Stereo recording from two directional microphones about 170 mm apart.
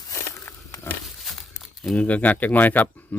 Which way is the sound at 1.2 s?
Centre (ahead or behind).